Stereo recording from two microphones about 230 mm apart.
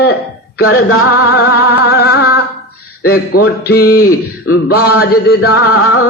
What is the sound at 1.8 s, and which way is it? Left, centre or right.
Music, left.